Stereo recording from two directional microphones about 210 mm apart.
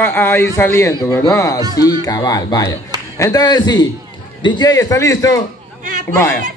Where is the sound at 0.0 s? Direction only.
10° left (ahead or behind).